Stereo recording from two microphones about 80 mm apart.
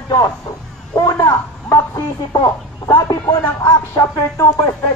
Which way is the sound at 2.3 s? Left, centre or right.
Left.